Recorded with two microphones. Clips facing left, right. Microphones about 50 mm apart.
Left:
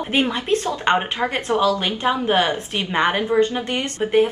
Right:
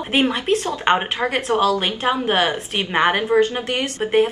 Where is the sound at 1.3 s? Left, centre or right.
Right.